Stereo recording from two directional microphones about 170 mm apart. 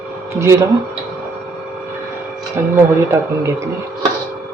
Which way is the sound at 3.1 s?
15° right (ahead or behind).